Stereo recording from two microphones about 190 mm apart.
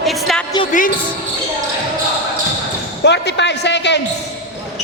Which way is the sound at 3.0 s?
65° left (ahead or behind).